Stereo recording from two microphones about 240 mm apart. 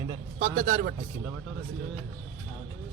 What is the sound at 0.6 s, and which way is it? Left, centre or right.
Speech, right.